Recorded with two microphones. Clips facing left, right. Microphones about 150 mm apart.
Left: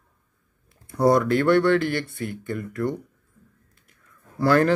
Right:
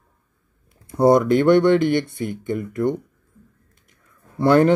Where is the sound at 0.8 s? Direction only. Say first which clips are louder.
Right 4 dB; 25° right (ahead or behind).